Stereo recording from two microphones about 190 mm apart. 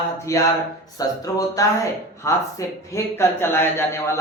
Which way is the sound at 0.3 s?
15° left (ahead or behind).